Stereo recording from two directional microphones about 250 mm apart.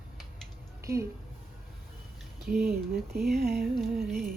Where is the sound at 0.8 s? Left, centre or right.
Centre.